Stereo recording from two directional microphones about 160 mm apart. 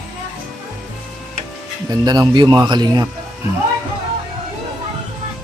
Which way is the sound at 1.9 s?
25° right (ahead or behind).